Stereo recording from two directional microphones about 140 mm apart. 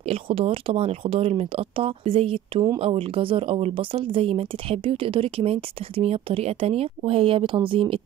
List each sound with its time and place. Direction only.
0.0 s speech: 45° right (ahead or behind)